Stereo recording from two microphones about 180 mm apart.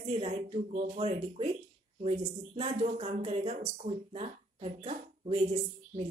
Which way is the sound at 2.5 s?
35° right (ahead or behind).